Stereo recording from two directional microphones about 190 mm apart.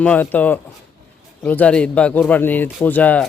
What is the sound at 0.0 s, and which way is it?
Speech, 10° left (ahead or behind).